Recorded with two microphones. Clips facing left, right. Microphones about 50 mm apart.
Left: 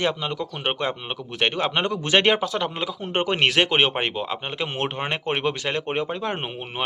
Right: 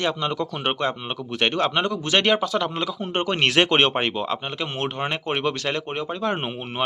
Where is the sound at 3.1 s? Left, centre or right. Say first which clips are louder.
Left 1 dB; left.